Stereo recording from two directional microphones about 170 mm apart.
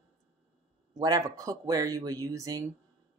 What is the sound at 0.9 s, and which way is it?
Speech, 20° right (ahead or behind).